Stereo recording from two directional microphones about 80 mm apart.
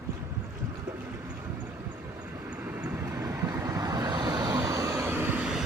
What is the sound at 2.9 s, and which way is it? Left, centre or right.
Vehicle, right.